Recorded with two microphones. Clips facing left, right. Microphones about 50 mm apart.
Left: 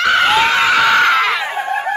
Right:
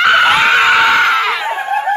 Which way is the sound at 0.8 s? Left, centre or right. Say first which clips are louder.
Right 1 dB; centre.